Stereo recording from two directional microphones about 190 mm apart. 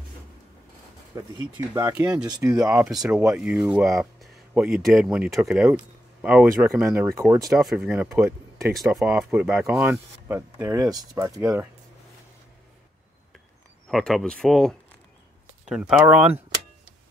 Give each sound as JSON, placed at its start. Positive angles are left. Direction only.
{"t": 1.1, "sound": "speech", "side_deg": -20}
{"t": 2.9, "sound": "speech", "side_deg": -5}
{"t": 8.7, "sound": "speech", "side_deg": -5}
{"t": 13.8, "sound": "speech", "side_deg": 0}